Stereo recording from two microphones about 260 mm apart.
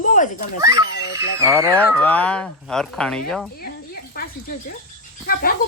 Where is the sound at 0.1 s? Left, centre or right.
Left.